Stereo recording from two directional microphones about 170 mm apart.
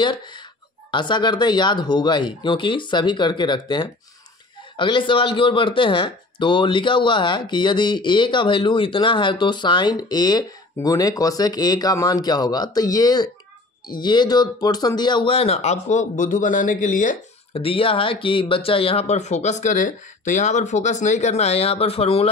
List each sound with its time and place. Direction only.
0.0 s speech: 25° left (ahead or behind); by 17.2 s 50° left (ahead or behind)
17.6 s speech: 35° left (ahead or behind)